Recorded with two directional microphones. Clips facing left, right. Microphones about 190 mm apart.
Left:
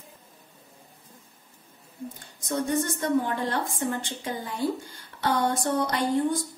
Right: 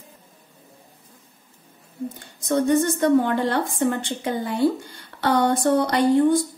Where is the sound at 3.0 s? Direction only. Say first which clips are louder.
Right 7 dB; 70° right (ahead or behind).